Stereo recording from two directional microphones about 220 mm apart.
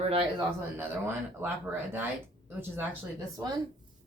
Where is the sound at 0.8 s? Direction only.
10° right (ahead or behind).